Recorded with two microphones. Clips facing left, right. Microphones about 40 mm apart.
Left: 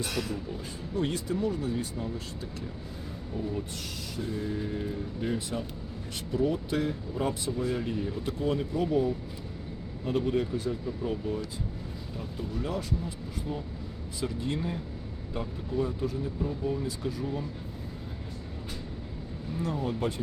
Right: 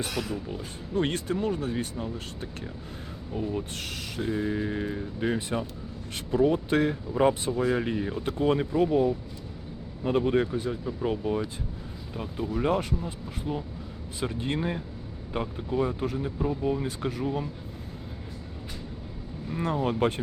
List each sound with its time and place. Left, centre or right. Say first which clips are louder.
0.1 s speech: right 1 dB; centre
0.9 s speech: right 3 dB; right
4.2 s speech: right 5 dB; right
10.5 s speech: right 1 dB; right
11.0 s speech: right 5 dB; right
13.5 s speech: right 5 dB; right
16.8 s speech: right 2 dB; right
19.5 s speech: right 5 dB; right